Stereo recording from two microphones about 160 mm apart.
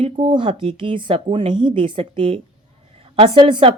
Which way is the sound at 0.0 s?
35° right (ahead or behind).